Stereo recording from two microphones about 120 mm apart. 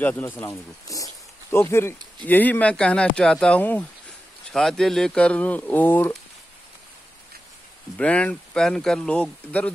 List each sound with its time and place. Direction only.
0.0 s speech: 20° left (ahead or behind)
8.0 s speech: 10° left (ahead or behind)